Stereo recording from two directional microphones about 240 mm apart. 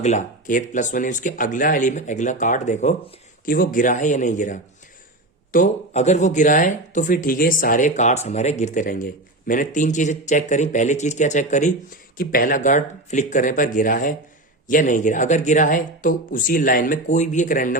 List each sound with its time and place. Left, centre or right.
0.0 s speech: left